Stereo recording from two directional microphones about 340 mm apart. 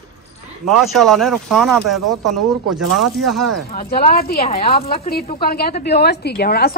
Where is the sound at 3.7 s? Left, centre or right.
Left.